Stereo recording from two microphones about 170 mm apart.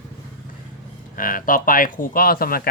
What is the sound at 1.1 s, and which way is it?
Speech, 55° left (ahead or behind).